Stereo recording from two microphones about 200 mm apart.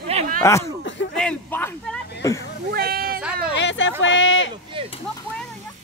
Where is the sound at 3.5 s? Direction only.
65° left (ahead or behind).